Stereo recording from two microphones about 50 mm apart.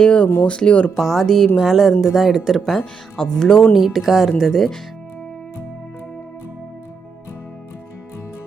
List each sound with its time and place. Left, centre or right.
0.0 s speech: left
0.9 s speech: centre
1.5 s speech: centre
3.8 s speech: centre